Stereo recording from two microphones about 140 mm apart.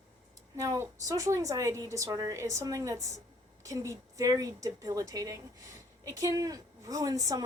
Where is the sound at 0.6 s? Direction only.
20° right (ahead or behind).